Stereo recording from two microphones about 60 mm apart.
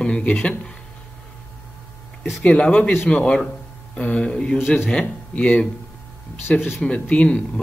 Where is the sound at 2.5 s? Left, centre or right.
Centre.